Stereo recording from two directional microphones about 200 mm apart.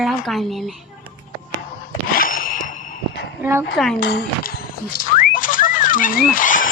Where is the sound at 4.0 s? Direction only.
55° left (ahead or behind).